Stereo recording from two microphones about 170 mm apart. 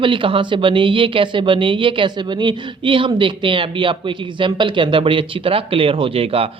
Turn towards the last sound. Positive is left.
turn(degrees=-35)  # may be behind; listen again after turning